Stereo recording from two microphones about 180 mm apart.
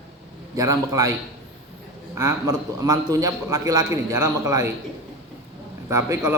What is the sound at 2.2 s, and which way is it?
A man's voice, 15° right (ahead or behind).